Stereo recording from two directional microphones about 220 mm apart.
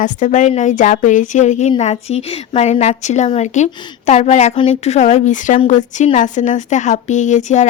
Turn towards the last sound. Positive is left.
turn(degrees=35)  # may be behind; listen again after turning